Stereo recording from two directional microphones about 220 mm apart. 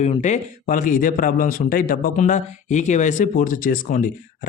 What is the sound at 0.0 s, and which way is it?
Speech, 30° left (ahead or behind).